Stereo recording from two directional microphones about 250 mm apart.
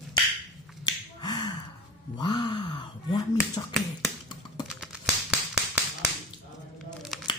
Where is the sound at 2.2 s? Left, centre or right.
Centre.